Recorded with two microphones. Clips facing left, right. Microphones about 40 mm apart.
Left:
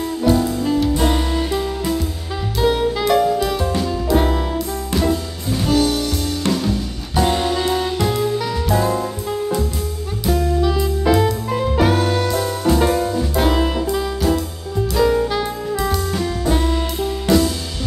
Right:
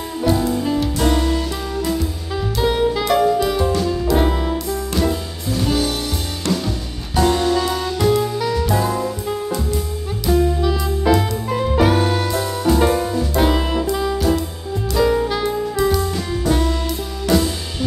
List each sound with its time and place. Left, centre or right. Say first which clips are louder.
0.2 s music: even; centre
1.1 s music: even; centre
5.6 s music: left 3 dB; centre
7.2 s music: right 2 dB; centre
8.0 s music: right 2 dB; centre
15.0 s saxophone: even; centre
17.3 s music: left 1 dB; centre